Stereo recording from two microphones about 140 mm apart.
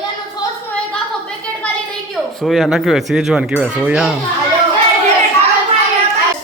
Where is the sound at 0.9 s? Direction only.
5° left (ahead or behind).